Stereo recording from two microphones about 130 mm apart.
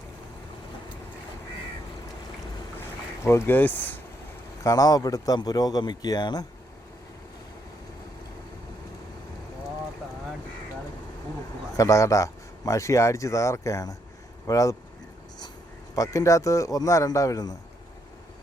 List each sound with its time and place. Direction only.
3.2 s speech: 20° left (ahead or behind)
4.6 s speech: 30° left (ahead or behind)
11.8 s speech: 25° left (ahead or behind)
16.0 s speech: 25° left (ahead or behind)